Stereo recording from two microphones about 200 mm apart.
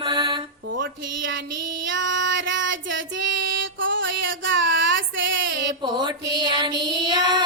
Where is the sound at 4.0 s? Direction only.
65° right (ahead or behind).